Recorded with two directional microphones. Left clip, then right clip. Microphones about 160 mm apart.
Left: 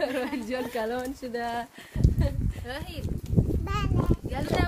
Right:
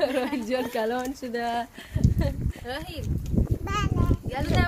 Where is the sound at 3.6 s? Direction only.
5° left (ahead or behind).